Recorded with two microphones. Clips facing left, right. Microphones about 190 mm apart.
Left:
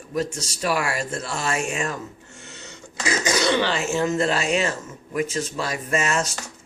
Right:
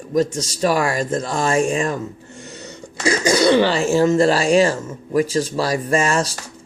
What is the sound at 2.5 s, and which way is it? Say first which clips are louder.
Throat clearing: right 6 dB; 35° right (ahead or behind).